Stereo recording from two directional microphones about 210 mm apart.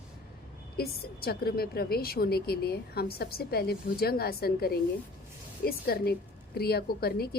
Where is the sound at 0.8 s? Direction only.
45° left (ahead or behind).